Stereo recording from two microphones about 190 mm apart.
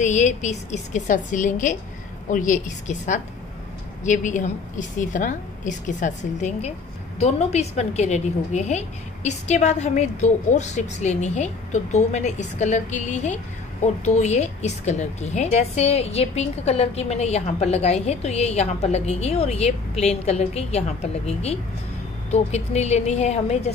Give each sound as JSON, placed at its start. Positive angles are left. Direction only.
{"t": 0.0, "sound": "a woman's voice", "side_deg": 40}